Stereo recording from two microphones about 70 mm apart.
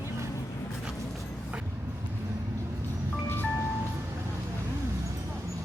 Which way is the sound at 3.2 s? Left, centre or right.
Left.